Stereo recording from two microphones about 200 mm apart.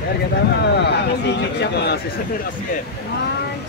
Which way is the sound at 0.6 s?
60° left (ahead or behind).